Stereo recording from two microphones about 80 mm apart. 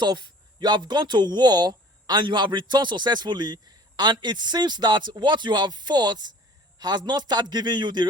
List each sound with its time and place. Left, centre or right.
0.0 s a man's voice: right